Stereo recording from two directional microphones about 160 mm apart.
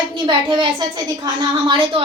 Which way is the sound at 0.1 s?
30° right (ahead or behind).